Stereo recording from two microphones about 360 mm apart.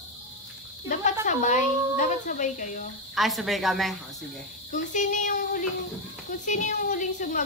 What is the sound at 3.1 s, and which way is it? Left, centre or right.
Speech, centre.